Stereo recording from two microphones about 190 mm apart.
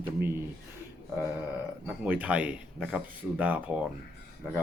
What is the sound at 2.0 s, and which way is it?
Speech, 5° right (ahead or behind).